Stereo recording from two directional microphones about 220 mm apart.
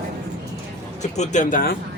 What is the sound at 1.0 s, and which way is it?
Speech, 30° left (ahead or behind).